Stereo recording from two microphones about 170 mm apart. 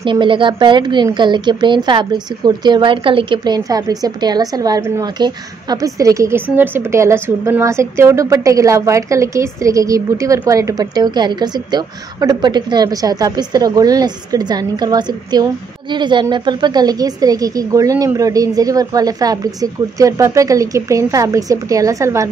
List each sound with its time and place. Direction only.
0.0 s a woman's voice: 30° right (ahead or behind)